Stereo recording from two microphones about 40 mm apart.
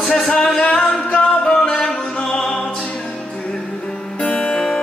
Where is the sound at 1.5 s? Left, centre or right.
Centre.